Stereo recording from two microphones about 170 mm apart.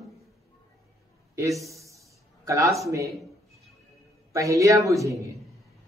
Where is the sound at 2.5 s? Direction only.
20° right (ahead or behind).